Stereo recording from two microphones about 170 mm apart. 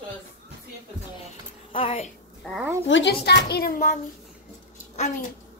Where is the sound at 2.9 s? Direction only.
85° left; by 4.0 s 55° left (ahead or behind).